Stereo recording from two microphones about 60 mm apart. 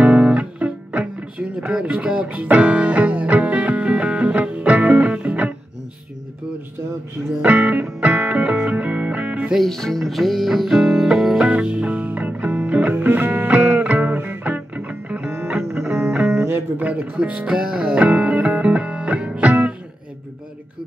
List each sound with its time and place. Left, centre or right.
0.0 s music: right
7.4 s music: right
9.5 s music: centre
11.3 s music: centre
16.3 s music: right
16.8 s music: right
17.5 s music: centre